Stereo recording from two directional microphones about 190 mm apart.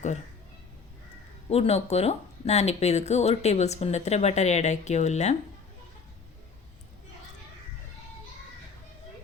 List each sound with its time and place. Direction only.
1.5 s speech: 35° left (ahead or behind)